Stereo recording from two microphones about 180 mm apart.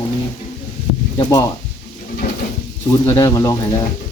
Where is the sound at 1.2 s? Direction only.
20° left (ahead or behind).